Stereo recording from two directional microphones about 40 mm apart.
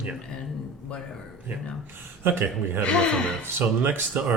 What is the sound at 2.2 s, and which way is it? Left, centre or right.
Speech, right.